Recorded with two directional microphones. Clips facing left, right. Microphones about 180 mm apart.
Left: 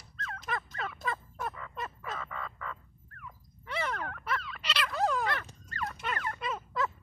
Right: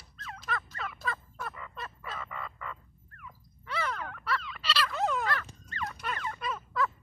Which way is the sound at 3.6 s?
20° left (ahead or behind).